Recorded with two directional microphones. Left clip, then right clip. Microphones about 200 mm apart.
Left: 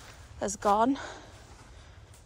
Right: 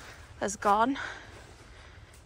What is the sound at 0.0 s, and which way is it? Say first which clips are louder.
Speech: right 1 dB; 15° left (ahead or behind).